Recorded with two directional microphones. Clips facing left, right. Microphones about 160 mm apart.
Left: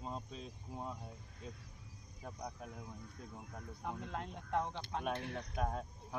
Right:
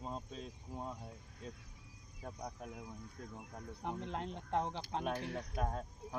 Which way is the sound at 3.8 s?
25° right (ahead or behind).